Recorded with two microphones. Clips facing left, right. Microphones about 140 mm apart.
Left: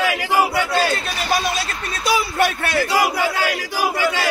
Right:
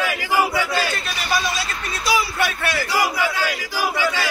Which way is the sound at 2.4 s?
45° left (ahead or behind).